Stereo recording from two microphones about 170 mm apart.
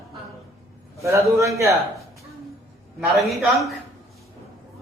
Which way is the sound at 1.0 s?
15° right (ahead or behind).